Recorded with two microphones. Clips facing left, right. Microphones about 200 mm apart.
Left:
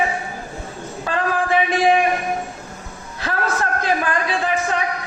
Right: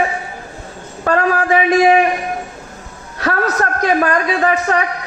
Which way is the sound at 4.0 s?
45° right (ahead or behind).